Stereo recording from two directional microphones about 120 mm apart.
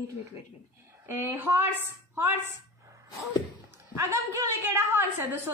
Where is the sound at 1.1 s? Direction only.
20° right (ahead or behind).